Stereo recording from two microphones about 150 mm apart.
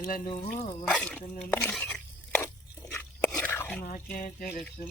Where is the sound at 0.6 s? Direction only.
45° left (ahead or behind).